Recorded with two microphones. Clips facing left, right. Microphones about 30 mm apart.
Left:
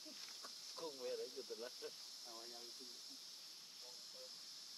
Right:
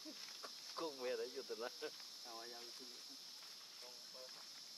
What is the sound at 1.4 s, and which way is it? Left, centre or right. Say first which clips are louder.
Speech: right 3 dB; right.